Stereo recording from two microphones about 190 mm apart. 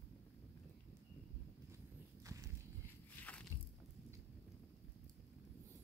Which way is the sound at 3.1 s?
10° left (ahead or behind).